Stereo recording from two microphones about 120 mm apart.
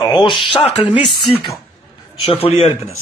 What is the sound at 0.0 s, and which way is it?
Speech, 40° left (ahead or behind).